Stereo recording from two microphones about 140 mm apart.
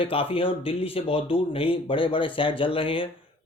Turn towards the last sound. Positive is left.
turn(degrees=40)  # may be behind; listen again after turning